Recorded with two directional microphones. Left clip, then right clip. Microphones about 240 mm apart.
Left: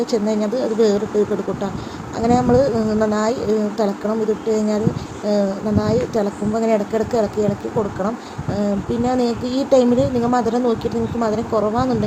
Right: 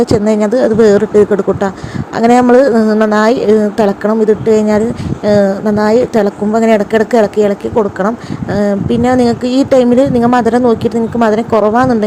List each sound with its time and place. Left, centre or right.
0.0 s speech: right
2.1 s speech: right